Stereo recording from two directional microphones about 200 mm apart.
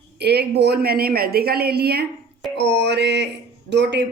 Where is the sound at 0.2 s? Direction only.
55° right (ahead or behind).